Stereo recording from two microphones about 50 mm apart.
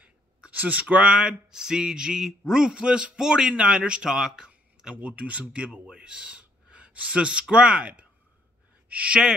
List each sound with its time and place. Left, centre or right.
0.0 s a sound: right
0.9 s speech: centre
4.9 s speech: right